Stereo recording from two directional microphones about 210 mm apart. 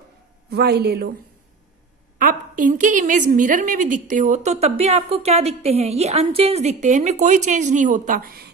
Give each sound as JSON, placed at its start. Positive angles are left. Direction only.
{"t": 0.5, "sound": "a man's voice", "side_deg": -50}
{"t": 2.1, "sound": "a woman's voice", "side_deg": -40}